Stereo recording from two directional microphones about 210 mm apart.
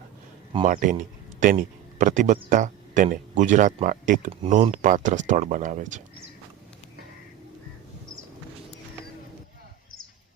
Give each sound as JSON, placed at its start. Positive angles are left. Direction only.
{"t": 0.5, "sound": "a man's voice", "side_deg": -40}
{"t": 4.3, "sound": "speech", "side_deg": -25}